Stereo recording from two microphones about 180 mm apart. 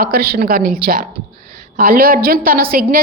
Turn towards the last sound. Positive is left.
turn(degrees=-55)  # may be behind; listen again after turning